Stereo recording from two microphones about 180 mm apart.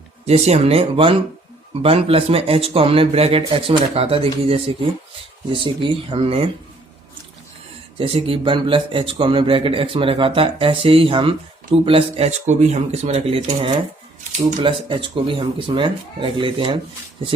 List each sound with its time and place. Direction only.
0.3 s speech: 35° right (ahead or behind)
7.9 s speech: 30° right (ahead or behind)